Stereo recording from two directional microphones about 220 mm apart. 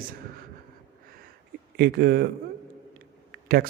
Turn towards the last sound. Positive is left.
turn(degrees=-40)  # may be behind; listen again after turning